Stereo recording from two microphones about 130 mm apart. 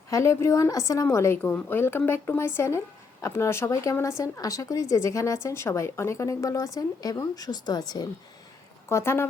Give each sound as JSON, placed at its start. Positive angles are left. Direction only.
{"t": 0.1, "sound": "a woman's voice", "side_deg": 20}
{"t": 1.5, "sound": "a woman's voice", "side_deg": 10}
{"t": 8.9, "sound": "a woman's voice", "side_deg": 20}